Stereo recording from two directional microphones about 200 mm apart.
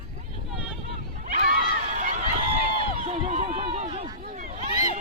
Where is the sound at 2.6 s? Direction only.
40° right (ahead or behind).